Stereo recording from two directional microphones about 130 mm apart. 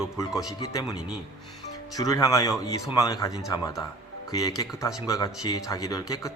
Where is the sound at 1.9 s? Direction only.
30° left (ahead or behind).